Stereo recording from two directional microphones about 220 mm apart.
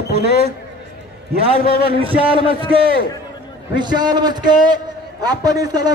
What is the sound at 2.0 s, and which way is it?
Speech, 25° right (ahead or behind).